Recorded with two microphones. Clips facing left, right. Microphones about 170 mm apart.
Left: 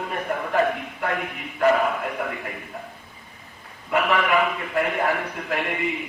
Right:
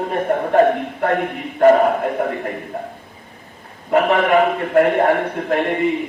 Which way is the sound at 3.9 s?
40° right (ahead or behind).